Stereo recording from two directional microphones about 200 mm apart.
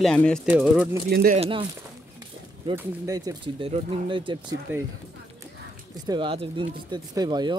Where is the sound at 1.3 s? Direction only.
30° right (ahead or behind).